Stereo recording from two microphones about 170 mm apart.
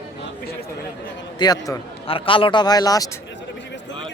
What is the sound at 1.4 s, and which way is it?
Speech, 25° left (ahead or behind).